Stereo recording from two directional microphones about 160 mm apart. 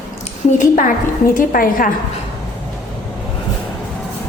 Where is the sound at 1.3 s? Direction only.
65° left (ahead or behind).